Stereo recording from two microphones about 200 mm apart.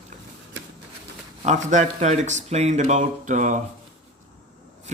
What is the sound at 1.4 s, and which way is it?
Speech, 35° right (ahead or behind).